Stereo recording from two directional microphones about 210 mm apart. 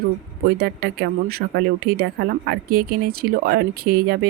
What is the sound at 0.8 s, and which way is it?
Speech, 45° right (ahead or behind).